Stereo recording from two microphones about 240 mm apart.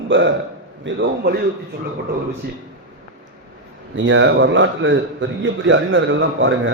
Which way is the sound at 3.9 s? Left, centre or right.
Right.